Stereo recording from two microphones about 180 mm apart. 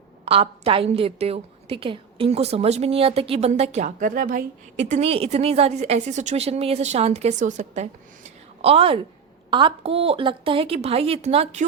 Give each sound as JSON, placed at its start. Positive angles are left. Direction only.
{"t": 0.3, "sound": "a woman's voice", "side_deg": -30}